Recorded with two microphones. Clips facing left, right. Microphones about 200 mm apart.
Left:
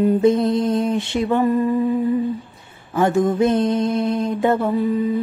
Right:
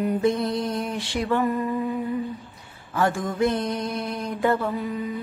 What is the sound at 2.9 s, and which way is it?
Music, 20° left (ahead or behind).